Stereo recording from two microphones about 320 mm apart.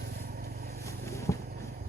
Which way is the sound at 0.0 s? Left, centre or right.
Right.